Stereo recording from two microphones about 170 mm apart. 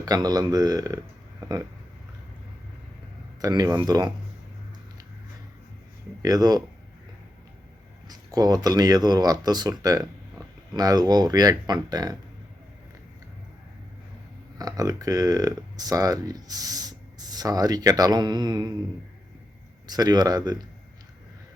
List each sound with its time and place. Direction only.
0.0 s speech: 25° right (ahead or behind)
1.4 s a sound: 20° right (ahead or behind)
3.4 s speech: 20° right (ahead or behind)
6.2 s speech: 20° right (ahead or behind)
8.0 s speech: 20° right (ahead or behind)
14.6 s speech: 20° right (ahead or behind)
19.9 s speech: 25° right (ahead or behind)